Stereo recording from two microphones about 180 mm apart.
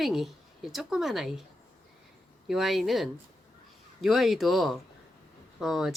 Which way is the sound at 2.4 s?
Centre (ahead or behind).